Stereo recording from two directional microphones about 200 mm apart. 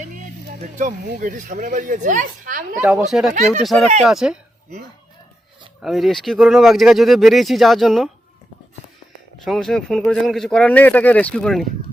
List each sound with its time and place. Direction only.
0.8 s speech: 40° right (ahead or behind)
3.1 s speech: centre (ahead or behind)
5.8 s speech: centre (ahead or behind)
9.4 s speech: centre (ahead or behind)